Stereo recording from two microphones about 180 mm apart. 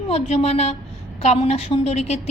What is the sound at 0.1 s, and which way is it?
Speech, 35° left (ahead or behind).